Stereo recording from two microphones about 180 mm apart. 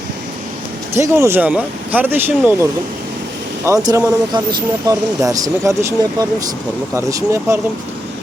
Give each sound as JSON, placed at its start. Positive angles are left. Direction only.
{"t": 0.9, "sound": "speech", "side_deg": -15}
{"t": 3.7, "sound": "speech", "side_deg": -20}